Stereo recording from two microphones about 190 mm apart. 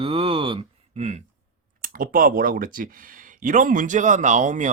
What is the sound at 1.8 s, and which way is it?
Speech, 45° right (ahead or behind).